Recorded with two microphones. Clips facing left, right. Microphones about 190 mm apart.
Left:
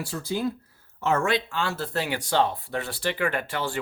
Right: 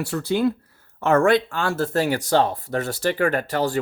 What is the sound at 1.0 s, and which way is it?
Speech, 55° right (ahead or behind).